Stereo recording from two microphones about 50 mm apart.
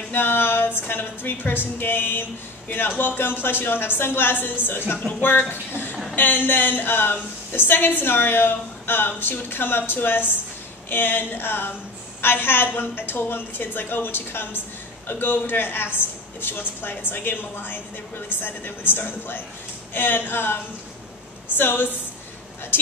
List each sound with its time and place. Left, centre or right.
0.1 s a woman's voice: left